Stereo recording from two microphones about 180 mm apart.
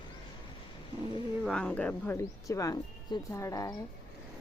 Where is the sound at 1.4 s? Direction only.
5° left (ahead or behind).